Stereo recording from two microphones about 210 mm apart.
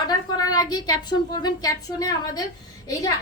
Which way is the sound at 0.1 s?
15° left (ahead or behind).